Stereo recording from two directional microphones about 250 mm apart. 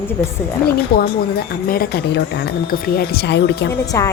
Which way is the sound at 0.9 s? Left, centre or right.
Left.